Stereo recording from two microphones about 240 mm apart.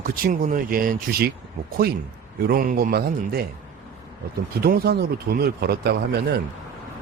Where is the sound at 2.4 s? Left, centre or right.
Right.